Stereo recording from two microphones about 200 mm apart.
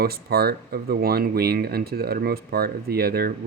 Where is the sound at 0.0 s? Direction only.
50° right (ahead or behind).